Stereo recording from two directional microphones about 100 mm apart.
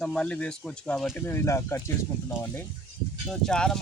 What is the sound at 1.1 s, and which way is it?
Speech, 20° left (ahead or behind).